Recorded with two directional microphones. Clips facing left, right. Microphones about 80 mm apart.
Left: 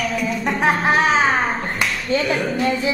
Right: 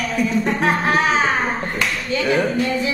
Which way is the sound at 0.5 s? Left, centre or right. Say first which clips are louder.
Left 4 dB; left.